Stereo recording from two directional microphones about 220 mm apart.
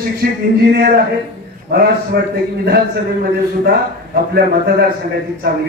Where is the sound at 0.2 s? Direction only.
40° right (ahead or behind).